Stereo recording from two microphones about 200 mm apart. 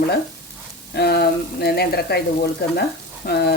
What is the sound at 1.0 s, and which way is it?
Speech, 55° left (ahead or behind).